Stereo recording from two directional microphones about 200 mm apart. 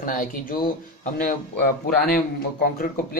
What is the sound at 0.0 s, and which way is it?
Speech, 45° left (ahead or behind).